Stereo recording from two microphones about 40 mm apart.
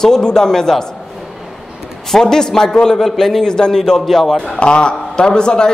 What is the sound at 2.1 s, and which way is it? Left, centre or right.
A man's voice, centre.